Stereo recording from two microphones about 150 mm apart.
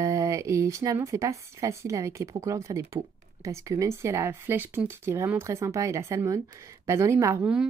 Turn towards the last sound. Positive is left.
turn(degrees=-20)  # may be behind; listen again after turning